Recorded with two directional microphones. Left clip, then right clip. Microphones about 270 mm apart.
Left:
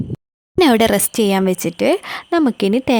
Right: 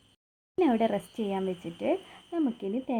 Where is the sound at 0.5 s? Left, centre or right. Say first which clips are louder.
Left 13 dB; left.